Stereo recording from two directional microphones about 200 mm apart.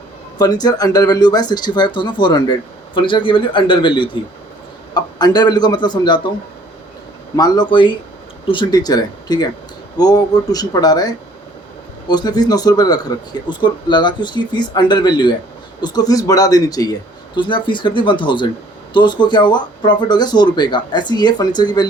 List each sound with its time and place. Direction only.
0.3 s speech: 20° left (ahead or behind)
7.3 s speech: 20° left (ahead or behind)